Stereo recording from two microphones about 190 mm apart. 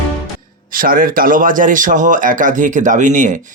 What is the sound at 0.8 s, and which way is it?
Speech, 50° right (ahead or behind).